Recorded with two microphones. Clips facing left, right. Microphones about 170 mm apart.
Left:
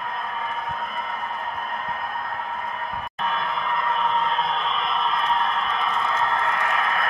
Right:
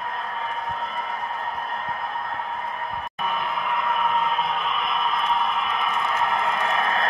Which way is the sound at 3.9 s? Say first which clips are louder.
Even; 10° right (ahead or behind).